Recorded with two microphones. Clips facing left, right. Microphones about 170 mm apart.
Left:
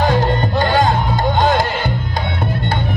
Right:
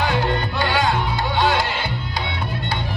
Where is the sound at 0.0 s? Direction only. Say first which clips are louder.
Left 5 dB; 45° left (ahead or behind).